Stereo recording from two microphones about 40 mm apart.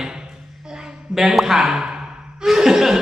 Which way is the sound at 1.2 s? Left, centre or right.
Centre.